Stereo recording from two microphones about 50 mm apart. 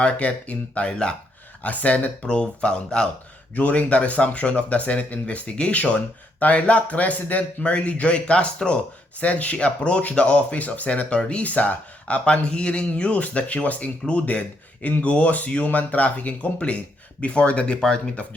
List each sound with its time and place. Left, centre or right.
0.0 s speech: left